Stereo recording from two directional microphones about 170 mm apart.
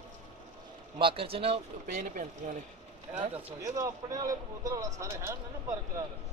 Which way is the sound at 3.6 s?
20° right (ahead or behind).